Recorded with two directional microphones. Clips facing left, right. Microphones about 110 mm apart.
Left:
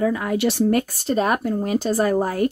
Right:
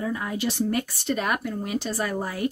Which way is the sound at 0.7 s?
40° left (ahead or behind).